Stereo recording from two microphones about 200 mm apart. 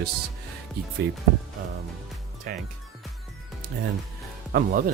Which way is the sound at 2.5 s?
45° right (ahead or behind).